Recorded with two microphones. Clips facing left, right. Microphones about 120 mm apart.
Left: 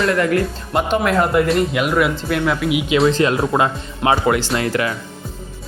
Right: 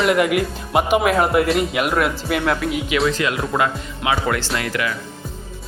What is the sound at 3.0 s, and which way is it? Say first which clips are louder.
Speech: left 5 dB; 30° left (ahead or behind).